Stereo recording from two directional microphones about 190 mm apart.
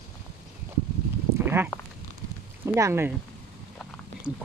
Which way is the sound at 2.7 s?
15° right (ahead or behind).